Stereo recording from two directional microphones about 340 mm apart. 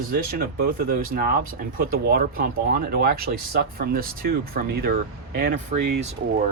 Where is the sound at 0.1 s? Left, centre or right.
Right.